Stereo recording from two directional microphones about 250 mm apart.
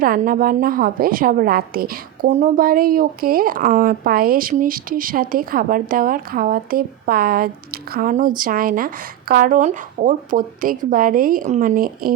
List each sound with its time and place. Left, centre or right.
0.0 s a woman's voice: right